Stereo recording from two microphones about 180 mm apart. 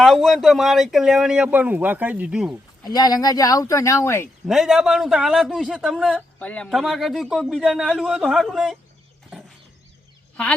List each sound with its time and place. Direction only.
0.0 s speech: centre (ahead or behind)
2.8 s speech: 20° left (ahead or behind)
4.4 s speech: centre (ahead or behind)